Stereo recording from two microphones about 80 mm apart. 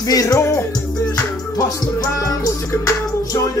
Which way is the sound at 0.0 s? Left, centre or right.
Left.